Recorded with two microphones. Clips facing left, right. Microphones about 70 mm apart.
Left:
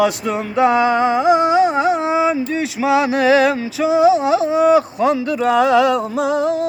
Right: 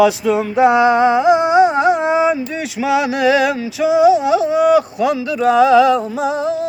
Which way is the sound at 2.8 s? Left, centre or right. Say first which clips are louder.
Even; left.